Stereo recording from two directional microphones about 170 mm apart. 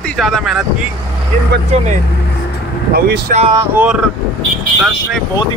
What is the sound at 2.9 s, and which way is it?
Speech, 60° right (ahead or behind).